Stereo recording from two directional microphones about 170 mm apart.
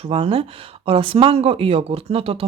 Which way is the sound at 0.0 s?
35° right (ahead or behind).